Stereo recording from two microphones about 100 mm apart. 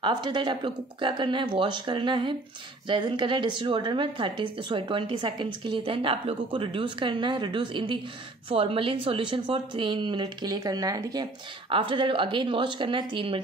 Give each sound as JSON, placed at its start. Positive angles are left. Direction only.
{"t": 0.0, "sound": "speech", "side_deg": -50}
{"t": 9.8, "sound": "speech", "side_deg": -50}
{"t": 11.7, "sound": "speech", "side_deg": -60}